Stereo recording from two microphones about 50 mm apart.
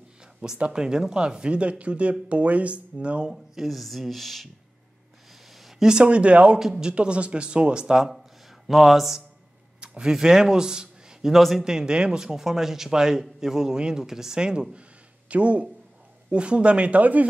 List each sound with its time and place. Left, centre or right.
0.6 s speech: centre
3.3 s speech: centre
5.6 s a sound: centre
5.9 s speech: centre
6.6 s speech: centre
8.6 s speech: centre
9.8 s a sound: centre
10.1 s a man's voice: centre
11.3 s speech: centre
11.6 s a man's voice: centre; by 17.3 s right